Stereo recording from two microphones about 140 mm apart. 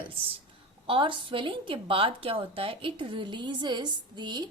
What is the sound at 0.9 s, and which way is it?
A woman's voice, 35° right (ahead or behind).